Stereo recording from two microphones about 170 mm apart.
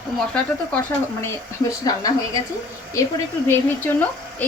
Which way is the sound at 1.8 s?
20° left (ahead or behind).